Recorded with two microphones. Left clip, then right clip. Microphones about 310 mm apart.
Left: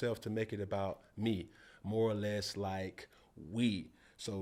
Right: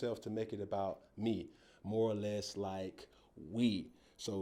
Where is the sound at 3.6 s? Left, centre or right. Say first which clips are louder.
Even; left.